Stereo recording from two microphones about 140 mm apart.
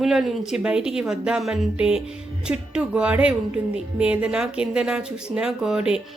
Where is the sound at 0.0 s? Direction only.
Centre (ahead or behind).